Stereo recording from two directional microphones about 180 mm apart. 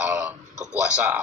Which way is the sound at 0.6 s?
10° right (ahead or behind).